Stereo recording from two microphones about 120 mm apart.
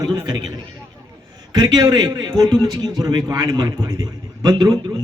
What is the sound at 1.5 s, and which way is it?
A man's voice, 35° right (ahead or behind).